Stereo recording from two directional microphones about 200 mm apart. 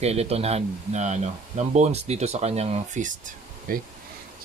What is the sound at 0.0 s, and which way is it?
Speech, 30° right (ahead or behind).